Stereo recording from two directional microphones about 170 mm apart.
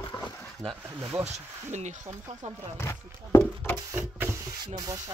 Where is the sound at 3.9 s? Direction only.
15° right (ahead or behind).